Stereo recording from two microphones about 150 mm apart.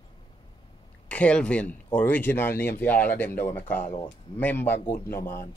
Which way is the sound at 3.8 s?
45° left (ahead or behind).